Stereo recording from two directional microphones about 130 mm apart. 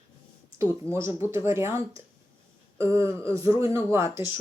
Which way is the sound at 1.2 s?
20° right (ahead or behind).